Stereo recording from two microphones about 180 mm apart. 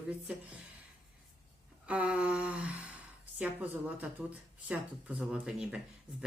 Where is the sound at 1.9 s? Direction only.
5° right (ahead or behind).